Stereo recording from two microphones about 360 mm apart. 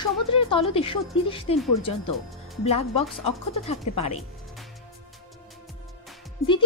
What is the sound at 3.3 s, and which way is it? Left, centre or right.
Speech, centre.